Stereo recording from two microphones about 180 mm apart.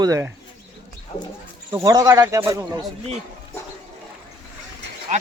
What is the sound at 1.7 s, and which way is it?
Speech, 20° right (ahead or behind).